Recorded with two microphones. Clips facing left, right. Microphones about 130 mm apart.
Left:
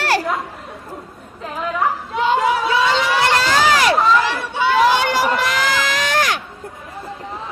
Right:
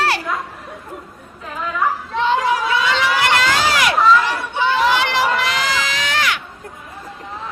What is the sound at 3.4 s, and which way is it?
Run, 35° left (ahead or behind).